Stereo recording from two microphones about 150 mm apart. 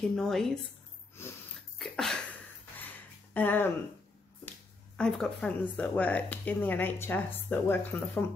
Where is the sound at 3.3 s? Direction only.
10° left (ahead or behind).